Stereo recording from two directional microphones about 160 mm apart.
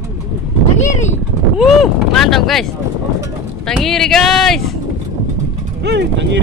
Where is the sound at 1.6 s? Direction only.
Centre (ahead or behind).